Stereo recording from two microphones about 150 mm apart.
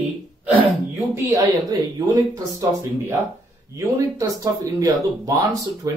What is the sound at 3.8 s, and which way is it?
Speech, 20° right (ahead or behind).